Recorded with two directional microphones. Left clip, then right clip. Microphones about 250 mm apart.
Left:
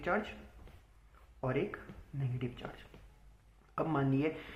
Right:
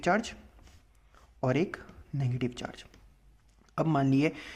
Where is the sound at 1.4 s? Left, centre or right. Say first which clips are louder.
Right 6 dB; right.